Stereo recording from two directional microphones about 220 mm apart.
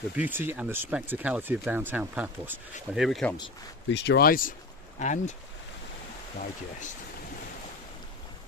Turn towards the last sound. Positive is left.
turn(degrees=35)  # may be behind; listen again after turning